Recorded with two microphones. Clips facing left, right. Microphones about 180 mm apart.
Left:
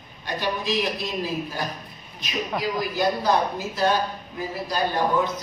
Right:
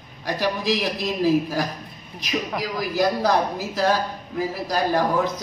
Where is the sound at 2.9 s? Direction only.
90° right.